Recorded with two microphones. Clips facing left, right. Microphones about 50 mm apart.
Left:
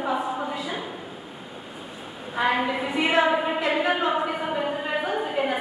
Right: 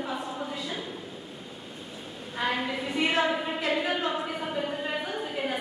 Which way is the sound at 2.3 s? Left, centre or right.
Centre.